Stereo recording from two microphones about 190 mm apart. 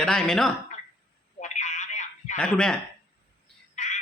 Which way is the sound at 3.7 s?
40° left (ahead or behind).